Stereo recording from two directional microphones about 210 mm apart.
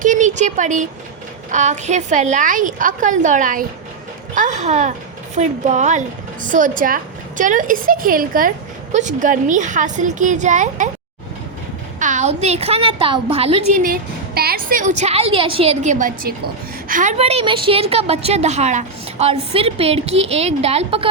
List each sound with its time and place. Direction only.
0.0 s speech: 35° right (ahead or behind)
11.9 s a woman's voice: 35° right (ahead or behind)
13.8 s a woman's voice: 45° right (ahead or behind); by 21.1 s 30° right (ahead or behind)